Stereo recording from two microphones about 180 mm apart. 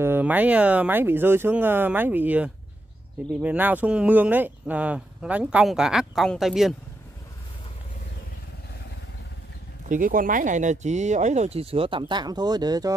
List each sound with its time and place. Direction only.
0.0 s speech: 10° right (ahead or behind)
9.8 s speech: 50° right (ahead or behind); by 12.9 s 20° right (ahead or behind)